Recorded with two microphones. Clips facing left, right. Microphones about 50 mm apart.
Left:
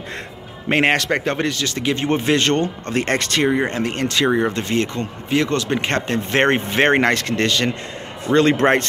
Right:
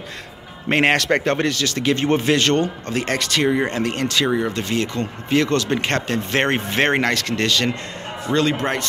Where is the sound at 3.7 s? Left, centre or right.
Left.